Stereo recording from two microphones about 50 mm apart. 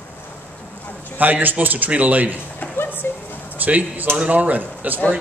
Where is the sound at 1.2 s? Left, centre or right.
Right.